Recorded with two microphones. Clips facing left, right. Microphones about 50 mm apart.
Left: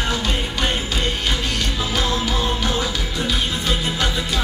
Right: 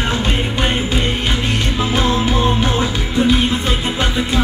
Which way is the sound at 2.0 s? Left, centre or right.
Right.